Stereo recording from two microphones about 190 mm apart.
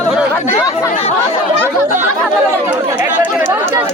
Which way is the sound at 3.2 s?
10° right (ahead or behind).